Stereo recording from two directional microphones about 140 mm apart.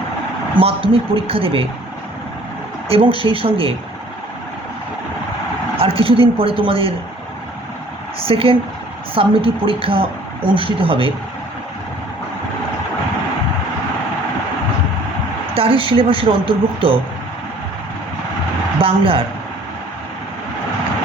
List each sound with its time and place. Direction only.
0.6 s speech: 40° right (ahead or behind)
2.9 s speech: 40° right (ahead or behind)
5.7 s speech: 40° right (ahead or behind)
8.2 s speech: 40° right (ahead or behind)
15.5 s speech: 40° right (ahead or behind)
18.8 s a woman's voice: 40° right (ahead or behind)